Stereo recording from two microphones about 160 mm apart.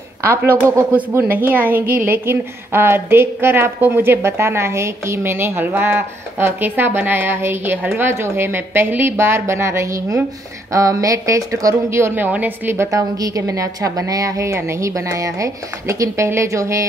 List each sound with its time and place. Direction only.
0.2 s a woman's voice: 15° right (ahead or behind)